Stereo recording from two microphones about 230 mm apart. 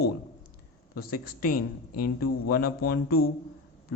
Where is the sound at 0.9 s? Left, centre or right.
Left.